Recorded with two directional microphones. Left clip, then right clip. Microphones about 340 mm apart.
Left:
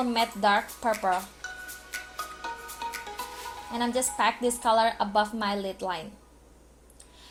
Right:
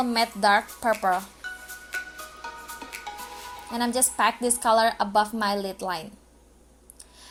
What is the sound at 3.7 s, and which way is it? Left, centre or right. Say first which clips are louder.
A woman's voice: right 2 dB; centre.